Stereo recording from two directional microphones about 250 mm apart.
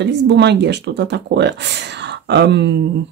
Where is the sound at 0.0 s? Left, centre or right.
Right.